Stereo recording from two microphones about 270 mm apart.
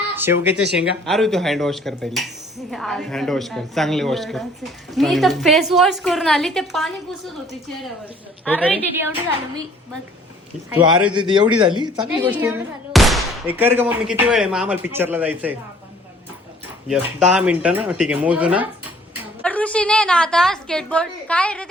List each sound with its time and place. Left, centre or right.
0.2 s speech: centre
8.4 s speech: centre
10.7 s speech: centre
11.4 s speech: centre
11.7 s speech: centre
12.0 s speech: centre
16.9 s speech: centre
19.4 s speech: centre